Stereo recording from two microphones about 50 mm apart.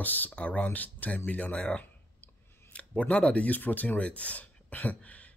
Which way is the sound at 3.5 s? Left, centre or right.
Left.